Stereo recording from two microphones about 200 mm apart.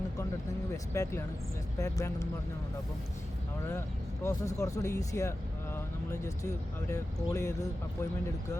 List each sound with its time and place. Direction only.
0.9 s speech: 15° left (ahead or behind)
3.7 s speech: 10° left (ahead or behind)
5.7 s vehicle: 15° left (ahead or behind)
6.9 s speech: 15° left (ahead or behind)